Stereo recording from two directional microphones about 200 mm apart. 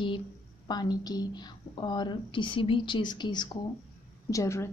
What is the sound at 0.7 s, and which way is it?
A woman's voice, 20° left (ahead or behind).